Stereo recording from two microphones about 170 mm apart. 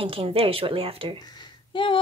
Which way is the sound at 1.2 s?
25° left (ahead or behind).